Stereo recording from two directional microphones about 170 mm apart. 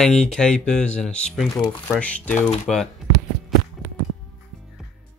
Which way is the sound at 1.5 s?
25° left (ahead or behind).